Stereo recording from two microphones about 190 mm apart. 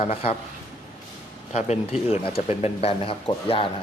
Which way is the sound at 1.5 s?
35° left (ahead or behind).